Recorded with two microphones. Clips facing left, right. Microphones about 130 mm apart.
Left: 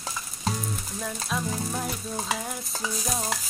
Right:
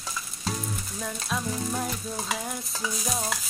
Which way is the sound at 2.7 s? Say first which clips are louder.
Even; 30° left (ahead or behind).